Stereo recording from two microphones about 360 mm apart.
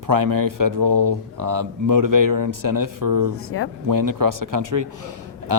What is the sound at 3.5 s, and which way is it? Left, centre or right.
Speech, left.